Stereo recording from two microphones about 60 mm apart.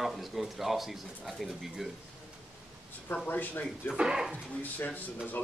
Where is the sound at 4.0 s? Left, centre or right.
Centre.